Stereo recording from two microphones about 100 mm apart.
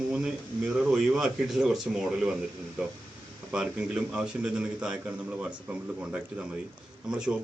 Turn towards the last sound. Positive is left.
turn(degrees=-10)  # may be behind; listen again after turning